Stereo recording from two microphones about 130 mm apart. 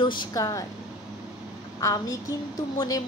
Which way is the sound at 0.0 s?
35° left (ahead or behind).